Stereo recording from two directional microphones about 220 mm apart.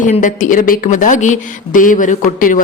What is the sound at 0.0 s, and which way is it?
Speech, 35° left (ahead or behind).